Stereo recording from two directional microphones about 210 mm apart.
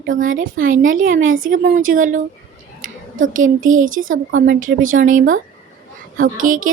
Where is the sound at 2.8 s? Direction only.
65° right (ahead or behind).